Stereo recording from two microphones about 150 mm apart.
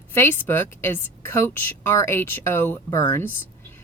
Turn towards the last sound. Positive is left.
turn(degrees=15)  # may be behind; listen again after turning